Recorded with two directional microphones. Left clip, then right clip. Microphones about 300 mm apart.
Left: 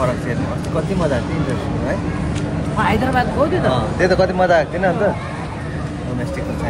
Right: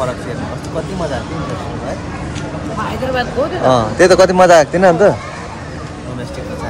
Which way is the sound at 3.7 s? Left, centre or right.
Right.